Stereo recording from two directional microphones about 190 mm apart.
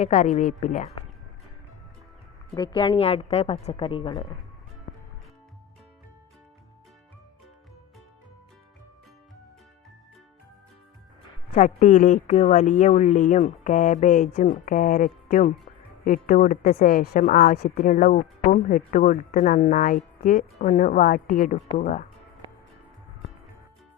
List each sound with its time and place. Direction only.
0.0 s speech: 40° left (ahead or behind)
2.6 s a woman's voice: 25° left (ahead or behind)
4.9 s music: 60° left (ahead or behind)
11.5 s speech: 45° left (ahead or behind)